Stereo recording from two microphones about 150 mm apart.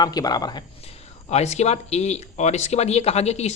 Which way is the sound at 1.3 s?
45° left (ahead or behind).